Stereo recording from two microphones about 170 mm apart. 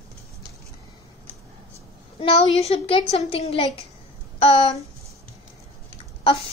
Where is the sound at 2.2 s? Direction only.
40° left (ahead or behind).